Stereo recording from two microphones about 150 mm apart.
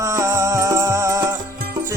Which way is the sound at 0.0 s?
20° right (ahead or behind).